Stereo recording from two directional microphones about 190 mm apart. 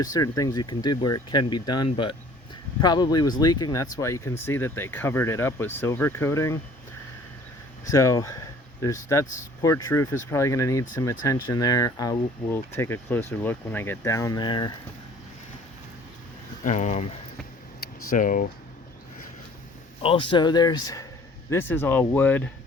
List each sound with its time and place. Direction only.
0.0 s speech: 20° left (ahead or behind)
7.9 s speech: 15° left (ahead or behind)
16.6 s speech: 40° left (ahead or behind)
20.0 s speech: 30° left (ahead or behind); by 22.4 s 10° left (ahead or behind)